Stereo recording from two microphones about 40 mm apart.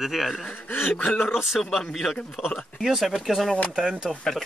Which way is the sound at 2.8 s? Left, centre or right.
Centre.